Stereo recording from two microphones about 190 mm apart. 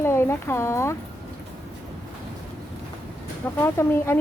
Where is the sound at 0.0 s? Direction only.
15° left (ahead or behind).